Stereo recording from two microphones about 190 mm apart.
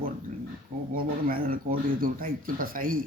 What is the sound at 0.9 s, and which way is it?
Speech, 50° right (ahead or behind).